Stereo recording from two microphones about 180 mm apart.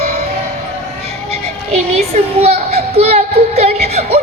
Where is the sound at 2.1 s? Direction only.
35° right (ahead or behind).